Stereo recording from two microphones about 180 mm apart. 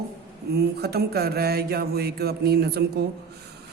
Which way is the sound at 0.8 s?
60° right (ahead or behind).